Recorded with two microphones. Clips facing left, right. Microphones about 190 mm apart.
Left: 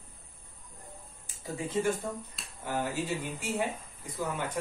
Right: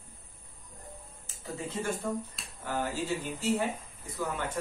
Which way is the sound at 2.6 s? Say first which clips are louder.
Even; 15° left (ahead or behind).